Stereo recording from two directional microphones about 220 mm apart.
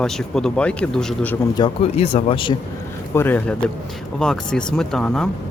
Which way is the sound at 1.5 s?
25° left (ahead or behind).